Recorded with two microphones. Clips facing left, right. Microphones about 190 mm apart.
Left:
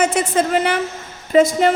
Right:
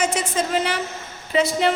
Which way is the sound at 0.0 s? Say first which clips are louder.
Left 5 dB; 55° left (ahead or behind).